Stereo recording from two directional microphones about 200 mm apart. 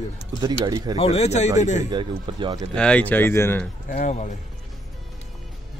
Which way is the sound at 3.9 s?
40° left (ahead or behind).